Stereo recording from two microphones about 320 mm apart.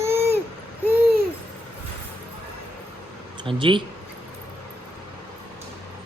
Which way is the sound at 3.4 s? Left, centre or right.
Centre.